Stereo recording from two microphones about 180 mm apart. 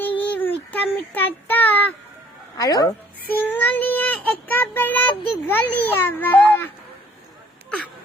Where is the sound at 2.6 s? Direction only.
20° left (ahead or behind).